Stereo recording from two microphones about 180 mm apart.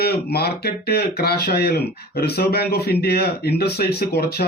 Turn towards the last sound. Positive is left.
turn(degrees=60)  # may be behind; listen again after turning